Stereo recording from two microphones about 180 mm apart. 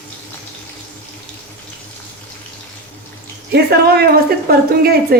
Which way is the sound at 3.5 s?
65° right (ahead or behind).